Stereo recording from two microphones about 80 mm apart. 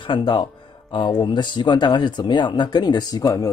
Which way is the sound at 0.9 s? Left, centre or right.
Left.